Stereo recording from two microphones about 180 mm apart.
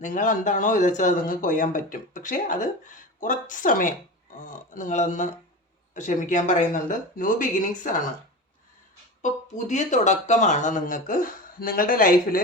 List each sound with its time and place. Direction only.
0.0 s speech: 45° left (ahead or behind)
9.2 s speech: 45° left (ahead or behind)